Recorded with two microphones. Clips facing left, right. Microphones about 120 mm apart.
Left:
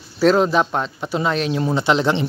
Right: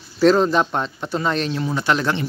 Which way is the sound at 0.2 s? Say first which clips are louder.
Even; 5° left (ahead or behind).